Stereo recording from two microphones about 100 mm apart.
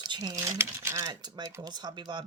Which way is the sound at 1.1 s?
45° right (ahead or behind).